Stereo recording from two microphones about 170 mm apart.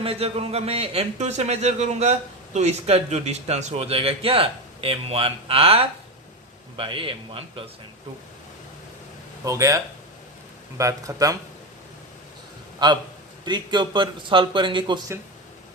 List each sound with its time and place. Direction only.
0.0 s speech: 35° right (ahead or behind)
9.4 s a man's voice: 20° right (ahead or behind)
12.8 s a man's voice: 25° right (ahead or behind)